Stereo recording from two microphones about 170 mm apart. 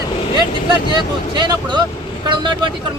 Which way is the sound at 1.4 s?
25° right (ahead or behind).